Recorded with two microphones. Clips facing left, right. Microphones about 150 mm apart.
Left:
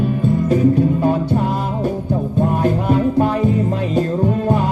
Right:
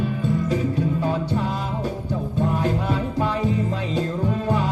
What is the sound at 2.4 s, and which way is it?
Music, 50° left (ahead or behind).